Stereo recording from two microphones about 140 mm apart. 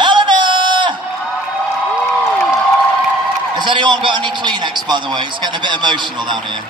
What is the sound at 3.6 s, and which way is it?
A man's voice, 30° right (ahead or behind).